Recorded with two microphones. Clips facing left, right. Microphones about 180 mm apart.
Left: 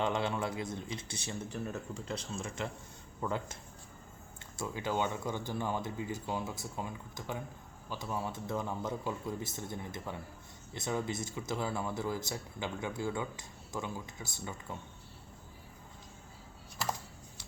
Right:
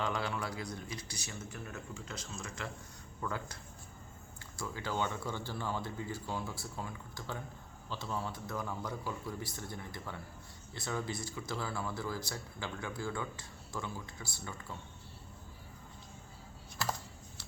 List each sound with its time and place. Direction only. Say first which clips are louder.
0.0 s speech: left 4 dB; 25° left (ahead or behind)